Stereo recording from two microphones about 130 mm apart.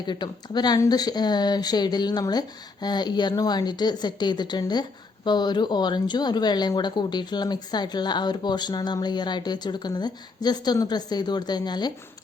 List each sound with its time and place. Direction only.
0.0 s speech: 35° left (ahead or behind)